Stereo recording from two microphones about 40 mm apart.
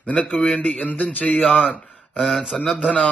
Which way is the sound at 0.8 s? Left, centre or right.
Left.